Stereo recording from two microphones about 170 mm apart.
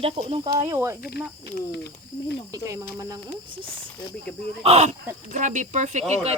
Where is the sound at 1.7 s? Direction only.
75° left (ahead or behind).